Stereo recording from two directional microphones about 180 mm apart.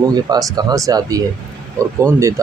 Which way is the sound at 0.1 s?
20° right (ahead or behind).